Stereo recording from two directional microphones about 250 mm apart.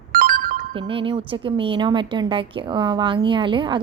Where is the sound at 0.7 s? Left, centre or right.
Right.